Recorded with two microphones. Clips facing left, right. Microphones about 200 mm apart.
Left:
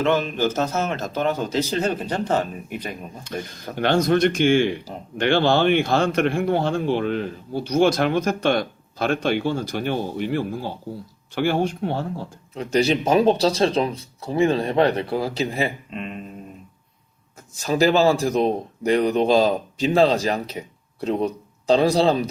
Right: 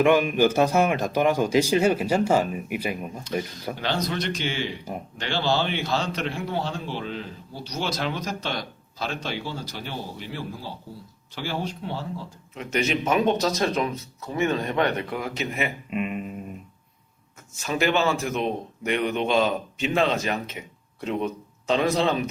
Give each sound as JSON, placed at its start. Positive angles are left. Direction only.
{"t": 0.0, "sound": "a man's voice", "side_deg": -15}
{"t": 3.8, "sound": "a man's voice", "side_deg": 50}
{"t": 12.5, "sound": "speech", "side_deg": 35}
{"t": 15.9, "sound": "a man's voice", "side_deg": -10}
{"t": 17.5, "sound": "speech", "side_deg": 35}